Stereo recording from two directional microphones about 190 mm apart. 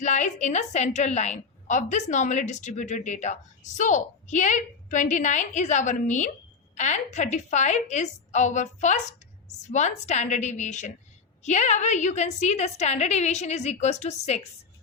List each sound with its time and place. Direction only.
0.0 s a woman's voice: 40° left (ahead or behind)